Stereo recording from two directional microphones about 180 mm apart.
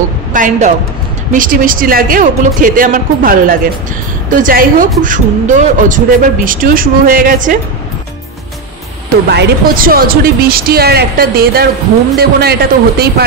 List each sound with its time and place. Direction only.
0.3 s a woman's voice: 45° right (ahead or behind)
9.3 s speech: 55° right (ahead or behind)